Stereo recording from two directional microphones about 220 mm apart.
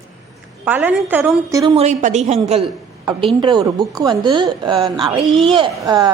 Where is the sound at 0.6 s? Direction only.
5° right (ahead or behind).